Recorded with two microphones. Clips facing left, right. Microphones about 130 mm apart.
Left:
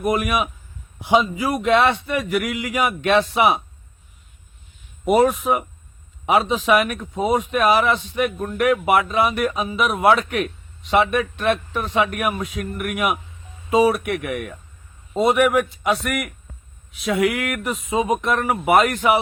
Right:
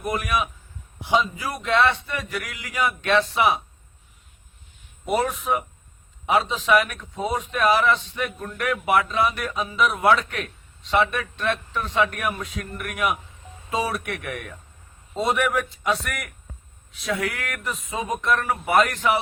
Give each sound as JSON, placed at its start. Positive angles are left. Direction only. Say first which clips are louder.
{"t": 0.0, "sound": "a man's voice", "louder": "left 5 dB", "side_deg": 10}
{"t": 5.0, "sound": "a man's voice", "louder": "left 7 dB", "side_deg": 10}